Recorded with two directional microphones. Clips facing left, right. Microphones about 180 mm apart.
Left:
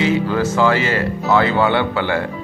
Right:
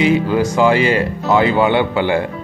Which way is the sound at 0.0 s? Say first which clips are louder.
Right 3 dB; 15° right (ahead or behind).